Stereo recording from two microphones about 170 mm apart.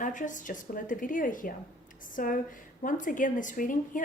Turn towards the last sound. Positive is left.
turn(degrees=50)  # may be behind; listen again after turning